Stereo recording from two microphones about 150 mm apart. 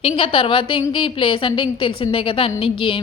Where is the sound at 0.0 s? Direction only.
40° left (ahead or behind).